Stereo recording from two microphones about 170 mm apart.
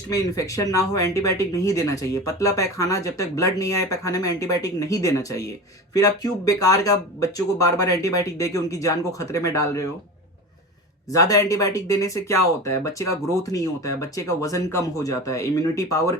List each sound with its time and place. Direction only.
0.1 s speech: 20° left (ahead or behind)
11.1 s speech: 20° left (ahead or behind)